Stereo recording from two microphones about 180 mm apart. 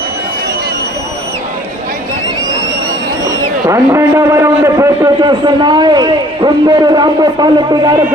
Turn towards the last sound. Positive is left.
turn(degrees=-25)  # may be behind; listen again after turning